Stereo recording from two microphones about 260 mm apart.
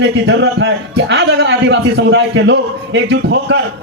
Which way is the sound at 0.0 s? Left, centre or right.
Right.